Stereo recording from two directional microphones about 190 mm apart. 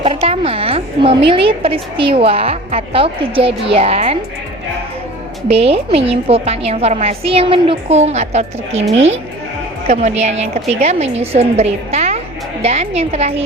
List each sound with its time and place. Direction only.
0.0 s a woman's voice: 30° right (ahead or behind)
5.5 s a woman's voice: 30° right (ahead or behind)